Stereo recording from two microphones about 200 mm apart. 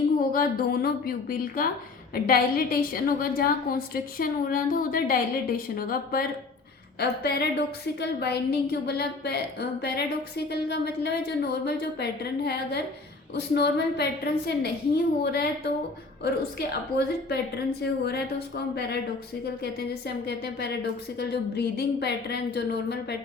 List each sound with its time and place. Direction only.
0.2 s a woman's voice: 45° left (ahead or behind)